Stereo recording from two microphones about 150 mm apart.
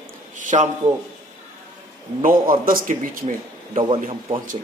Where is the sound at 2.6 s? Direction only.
65° right (ahead or behind).